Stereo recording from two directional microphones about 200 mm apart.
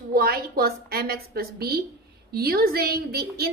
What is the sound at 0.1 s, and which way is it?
A woman's voice, 50° right (ahead or behind).